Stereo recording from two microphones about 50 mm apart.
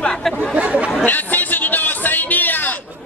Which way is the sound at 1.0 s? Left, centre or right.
Left.